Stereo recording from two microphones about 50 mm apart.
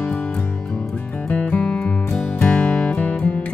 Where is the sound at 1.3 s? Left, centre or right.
Left.